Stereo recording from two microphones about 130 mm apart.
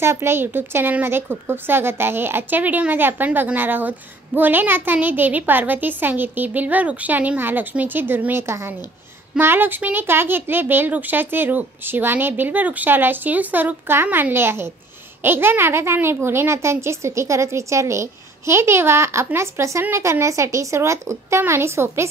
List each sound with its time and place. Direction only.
0.0 s a woman's voice: 20° right (ahead or behind)